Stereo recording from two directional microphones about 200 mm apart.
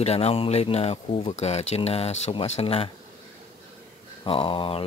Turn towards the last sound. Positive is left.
turn(degrees=25)  # may be behind; listen again after turning